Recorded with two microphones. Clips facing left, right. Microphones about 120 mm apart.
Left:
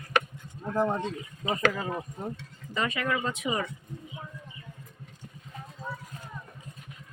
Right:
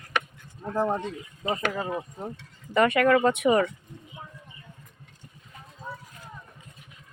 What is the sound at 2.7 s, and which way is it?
Speech, 60° right (ahead or behind).